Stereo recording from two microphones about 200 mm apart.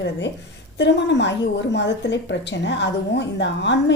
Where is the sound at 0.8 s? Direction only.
60° left (ahead or behind).